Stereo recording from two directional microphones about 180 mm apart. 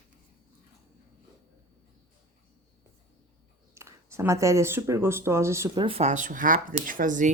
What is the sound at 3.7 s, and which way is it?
Speech, 15° right (ahead or behind).